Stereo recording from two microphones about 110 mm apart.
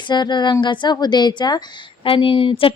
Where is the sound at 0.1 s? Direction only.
40° left (ahead or behind).